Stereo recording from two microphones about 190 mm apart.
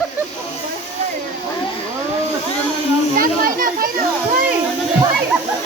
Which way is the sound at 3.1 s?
50° right (ahead or behind).